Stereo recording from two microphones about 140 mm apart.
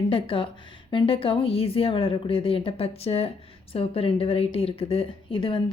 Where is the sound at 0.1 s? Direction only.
40° left (ahead or behind).